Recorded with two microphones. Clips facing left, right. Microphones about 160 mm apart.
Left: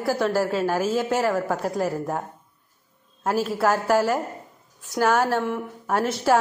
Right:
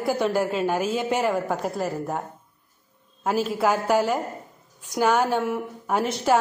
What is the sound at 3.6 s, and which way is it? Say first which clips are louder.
Speech: left 1 dB; 10° right (ahead or behind).